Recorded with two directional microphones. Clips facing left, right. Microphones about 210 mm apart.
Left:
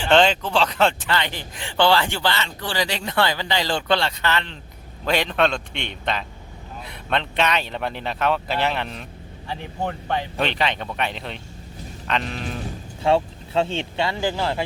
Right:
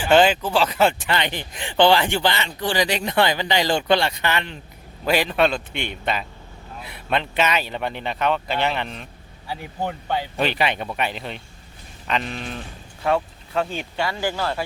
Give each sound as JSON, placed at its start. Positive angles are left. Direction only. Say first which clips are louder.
{"t": 0.0, "sound": "speech", "louder": "right 1 dB", "side_deg": -5}
{"t": 13.0, "sound": "speech", "louder": "left 2 dB", "side_deg": 25}